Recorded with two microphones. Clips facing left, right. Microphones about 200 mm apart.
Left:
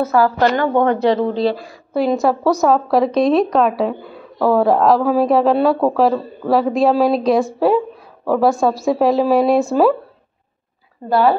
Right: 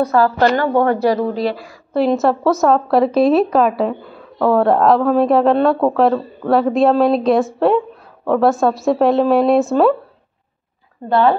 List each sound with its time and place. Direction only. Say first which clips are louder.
0.0 s a woman's voice: right 1 dB; 10° left (ahead or behind)
1.3 s speech: left 2 dB; 30° left (ahead or behind)
2.0 s speech: right 1 dB; centre (ahead or behind)
11.1 s speech: even; 5° left (ahead or behind)